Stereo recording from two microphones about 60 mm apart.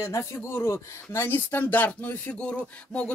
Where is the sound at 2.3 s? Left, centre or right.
Centre.